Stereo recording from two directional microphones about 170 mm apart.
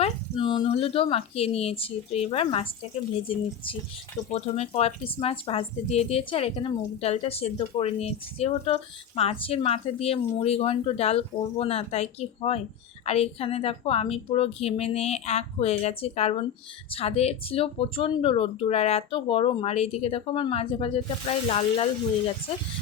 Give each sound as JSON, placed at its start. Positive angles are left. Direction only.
{"t": 0.0, "sound": "speech", "side_deg": 30}
{"t": 4.3, "sound": "speech", "side_deg": 40}